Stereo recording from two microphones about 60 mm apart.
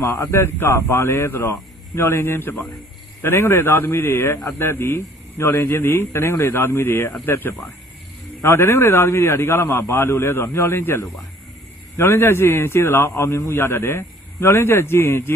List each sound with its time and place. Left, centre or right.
0.3 s a man's voice: left
2.5 s speech: centre
3.2 s a man's voice: left